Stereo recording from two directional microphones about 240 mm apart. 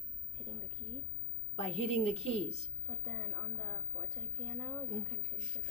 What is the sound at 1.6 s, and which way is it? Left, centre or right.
Speech, left.